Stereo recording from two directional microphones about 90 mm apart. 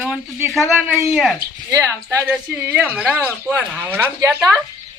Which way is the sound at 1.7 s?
35° right (ahead or behind).